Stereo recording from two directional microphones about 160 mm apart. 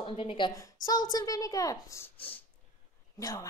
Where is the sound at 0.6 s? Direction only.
20° left (ahead or behind).